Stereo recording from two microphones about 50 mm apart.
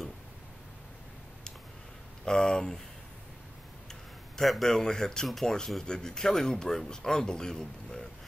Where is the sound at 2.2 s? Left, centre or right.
Centre.